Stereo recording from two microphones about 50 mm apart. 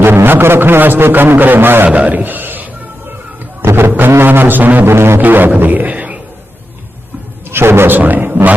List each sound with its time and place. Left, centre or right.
0.0 s a man's voice: right
1.9 s a man's voice: right
3.6 s a sound: right
4.2 s speech: right
4.9 s didgeridoo: right
5.2 s speech: right
7.5 s a man's voice: right
7.9 s a sound: right